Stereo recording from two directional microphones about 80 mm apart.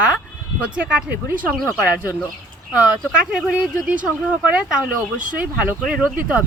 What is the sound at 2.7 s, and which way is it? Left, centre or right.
A woman's voice, centre.